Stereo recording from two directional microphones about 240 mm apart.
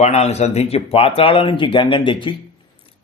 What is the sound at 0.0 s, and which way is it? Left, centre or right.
Speech, left.